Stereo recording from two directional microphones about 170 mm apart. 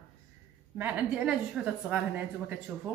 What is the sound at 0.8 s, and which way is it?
A woman's voice, 5° right (ahead or behind).